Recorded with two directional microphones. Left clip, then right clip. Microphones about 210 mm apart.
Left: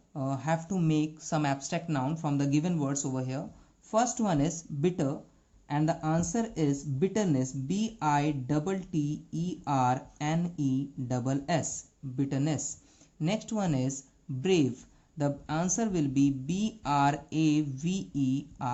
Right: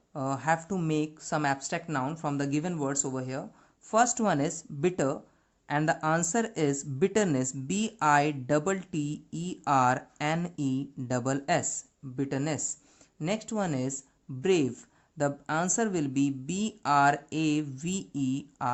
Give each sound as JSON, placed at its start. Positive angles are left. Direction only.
{"t": 0.1, "sound": "speech", "side_deg": -60}